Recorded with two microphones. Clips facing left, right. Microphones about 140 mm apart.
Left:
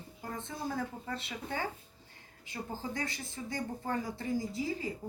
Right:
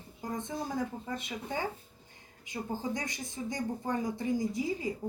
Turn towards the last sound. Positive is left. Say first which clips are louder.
# right 3 dB
turn(degrees=-20)  # may be behind; listen again after turning